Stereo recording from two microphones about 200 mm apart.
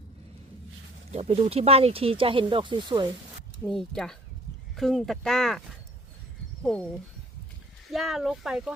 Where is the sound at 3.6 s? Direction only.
Centre (ahead or behind).